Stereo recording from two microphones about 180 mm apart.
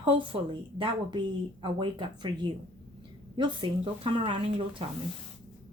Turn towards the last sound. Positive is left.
turn(degrees=-30)  # may be behind; listen again after turning